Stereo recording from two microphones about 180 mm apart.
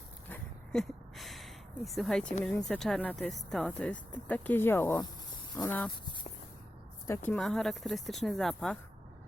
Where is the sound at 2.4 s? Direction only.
5° left (ahead or behind).